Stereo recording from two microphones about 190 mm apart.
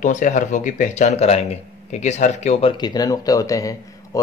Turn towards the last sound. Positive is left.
turn(degrees=15)  # may be behind; listen again after turning